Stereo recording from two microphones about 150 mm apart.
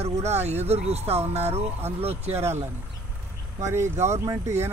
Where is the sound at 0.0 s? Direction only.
45° right (ahead or behind).